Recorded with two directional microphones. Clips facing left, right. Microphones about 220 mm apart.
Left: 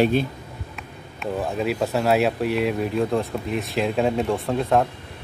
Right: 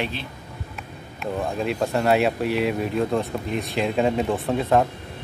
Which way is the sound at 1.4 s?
5° left (ahead or behind).